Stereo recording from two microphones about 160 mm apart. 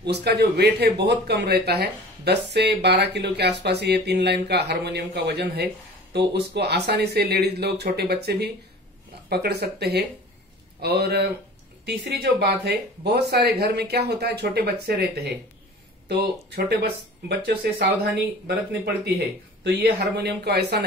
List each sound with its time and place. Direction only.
0.0 s speech: 90° right; by 18.2 s 75° right (ahead or behind)
19.6 s speech: 90° right